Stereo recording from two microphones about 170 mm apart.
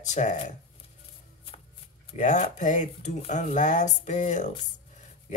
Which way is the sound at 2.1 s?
45° left (ahead or behind).